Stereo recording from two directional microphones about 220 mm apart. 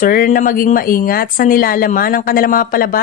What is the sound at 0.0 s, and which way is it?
A woman's voice, 40° left (ahead or behind).